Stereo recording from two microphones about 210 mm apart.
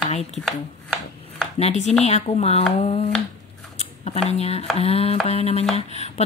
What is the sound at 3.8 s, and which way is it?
Speech, 30° left (ahead or behind).